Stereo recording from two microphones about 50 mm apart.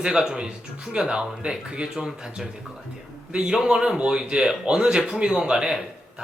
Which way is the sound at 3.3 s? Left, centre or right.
Centre.